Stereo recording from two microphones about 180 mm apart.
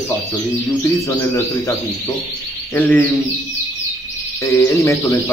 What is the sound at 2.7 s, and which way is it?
Speech, 10° left (ahead or behind).